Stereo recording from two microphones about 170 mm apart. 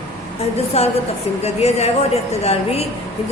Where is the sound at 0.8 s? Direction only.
35° left (ahead or behind).